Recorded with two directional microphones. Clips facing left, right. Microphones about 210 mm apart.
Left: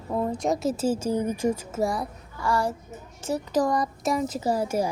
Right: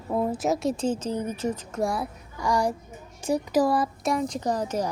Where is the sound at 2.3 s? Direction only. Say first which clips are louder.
Right 1 dB; 15° right (ahead or behind); by 4.9 s 10° left (ahead or behind).